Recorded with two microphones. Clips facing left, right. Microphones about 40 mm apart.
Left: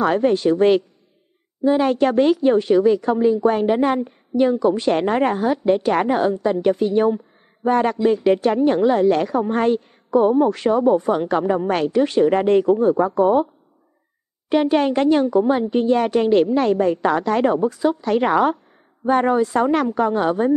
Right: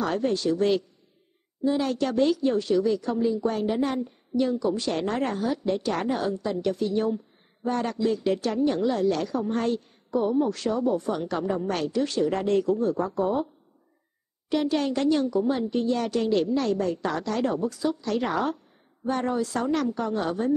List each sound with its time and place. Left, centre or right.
0.0 s speech: left
14.5 s speech: left